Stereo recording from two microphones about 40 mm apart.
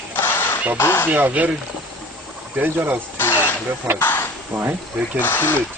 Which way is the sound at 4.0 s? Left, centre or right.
Left.